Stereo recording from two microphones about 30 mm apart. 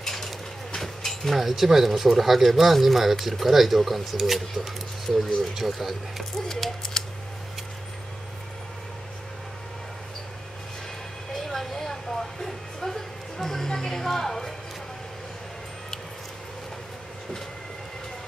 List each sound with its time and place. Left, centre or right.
0.0 s a sound: centre
1.4 s speech: centre
5.6 s speech: centre
6.8 s a sound: centre
11.3 s vehicle: centre
12.4 s music: centre